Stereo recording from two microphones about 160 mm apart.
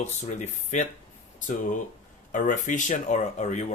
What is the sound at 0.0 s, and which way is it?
Speech, 50° left (ahead or behind).